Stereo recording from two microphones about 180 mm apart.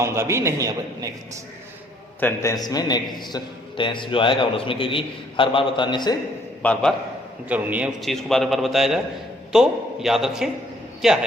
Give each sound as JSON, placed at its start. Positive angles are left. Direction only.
{"t": 0.0, "sound": "a man's voice", "side_deg": -15}
{"t": 2.2, "sound": "a man's voice", "side_deg": 15}
{"t": 6.6, "sound": "a man's voice", "side_deg": 10}
{"t": 7.4, "sound": "a man's voice", "side_deg": -10}